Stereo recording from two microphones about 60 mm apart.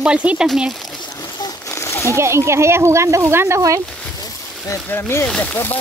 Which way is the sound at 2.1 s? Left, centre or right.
Right.